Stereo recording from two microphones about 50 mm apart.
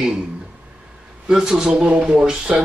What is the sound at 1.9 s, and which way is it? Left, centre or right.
Speech, right.